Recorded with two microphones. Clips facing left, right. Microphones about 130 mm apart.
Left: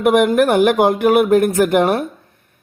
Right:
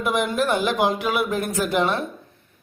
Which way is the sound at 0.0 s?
60° left (ahead or behind).